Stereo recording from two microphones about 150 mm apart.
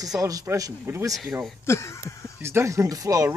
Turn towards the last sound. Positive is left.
turn(degrees=-20)  # may be behind; listen again after turning